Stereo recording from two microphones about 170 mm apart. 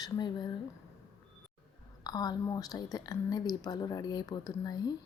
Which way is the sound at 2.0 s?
25° left (ahead or behind).